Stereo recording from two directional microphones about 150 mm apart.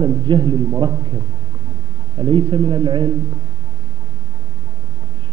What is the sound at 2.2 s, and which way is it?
Speech, 35° right (ahead or behind).